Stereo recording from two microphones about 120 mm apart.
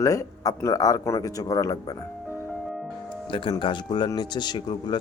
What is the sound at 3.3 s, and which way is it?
Speech, 45° left (ahead or behind).